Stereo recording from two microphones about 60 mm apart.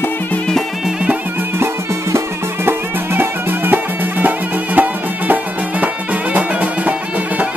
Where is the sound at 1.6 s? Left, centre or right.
Right.